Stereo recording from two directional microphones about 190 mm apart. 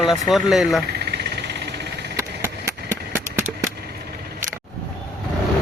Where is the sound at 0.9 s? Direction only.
60° right (ahead or behind).